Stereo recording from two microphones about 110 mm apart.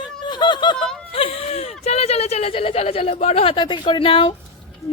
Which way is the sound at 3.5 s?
45° left (ahead or behind).